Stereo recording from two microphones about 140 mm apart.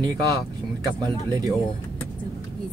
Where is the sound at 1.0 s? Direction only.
25° right (ahead or behind).